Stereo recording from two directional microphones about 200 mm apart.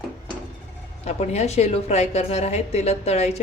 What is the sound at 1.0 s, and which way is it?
A woman's voice, 35° left (ahead or behind).